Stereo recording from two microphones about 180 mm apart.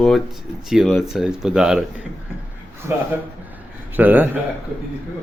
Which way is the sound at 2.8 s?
15° right (ahead or behind).